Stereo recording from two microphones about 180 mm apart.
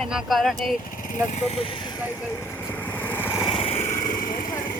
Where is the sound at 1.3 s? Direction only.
30° left (ahead or behind).